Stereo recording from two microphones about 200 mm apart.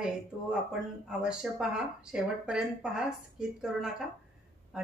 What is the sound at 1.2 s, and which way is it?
Speech, 5° right (ahead or behind).